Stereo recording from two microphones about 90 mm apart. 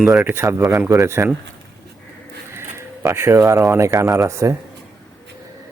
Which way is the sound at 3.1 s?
30° right (ahead or behind).